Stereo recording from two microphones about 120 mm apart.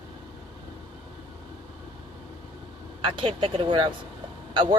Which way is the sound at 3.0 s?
45° right (ahead or behind).